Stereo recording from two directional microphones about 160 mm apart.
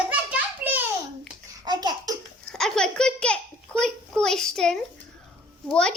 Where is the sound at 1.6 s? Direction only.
25° right (ahead or behind).